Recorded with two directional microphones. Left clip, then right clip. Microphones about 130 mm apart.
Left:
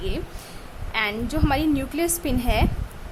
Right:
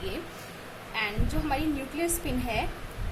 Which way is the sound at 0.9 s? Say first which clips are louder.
Left 7 dB; 45° left (ahead or behind).